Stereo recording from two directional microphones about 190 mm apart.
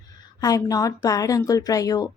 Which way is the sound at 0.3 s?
20° left (ahead or behind).